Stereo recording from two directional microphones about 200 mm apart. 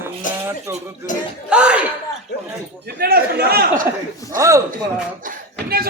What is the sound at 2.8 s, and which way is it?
A man's voice, 50° right (ahead or behind).